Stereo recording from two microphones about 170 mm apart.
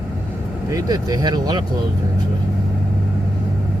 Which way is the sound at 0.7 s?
20° right (ahead or behind).